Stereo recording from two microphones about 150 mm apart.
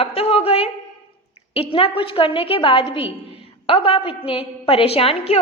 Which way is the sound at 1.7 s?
35° left (ahead or behind).